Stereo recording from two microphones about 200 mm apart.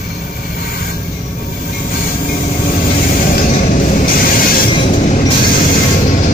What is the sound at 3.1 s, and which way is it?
Music, 45° left (ahead or behind).